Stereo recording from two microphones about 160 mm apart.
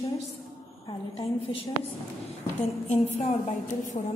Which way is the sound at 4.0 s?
40° left (ahead or behind).